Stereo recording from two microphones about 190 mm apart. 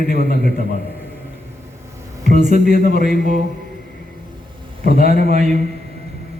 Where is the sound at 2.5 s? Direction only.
55° left (ahead or behind).